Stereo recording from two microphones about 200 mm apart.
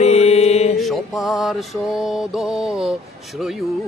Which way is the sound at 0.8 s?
Centre (ahead or behind).